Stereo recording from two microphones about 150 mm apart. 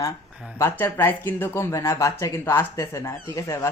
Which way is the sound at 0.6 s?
15° left (ahead or behind).